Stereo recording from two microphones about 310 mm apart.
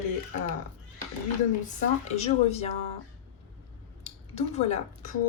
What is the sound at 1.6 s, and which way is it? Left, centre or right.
A woman's voice, left.